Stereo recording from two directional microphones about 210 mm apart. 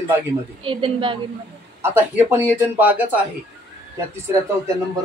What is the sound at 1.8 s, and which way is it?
Speech, 10° right (ahead or behind).